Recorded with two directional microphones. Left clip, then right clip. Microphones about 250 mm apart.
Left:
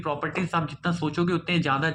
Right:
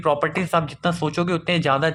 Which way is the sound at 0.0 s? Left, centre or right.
Right.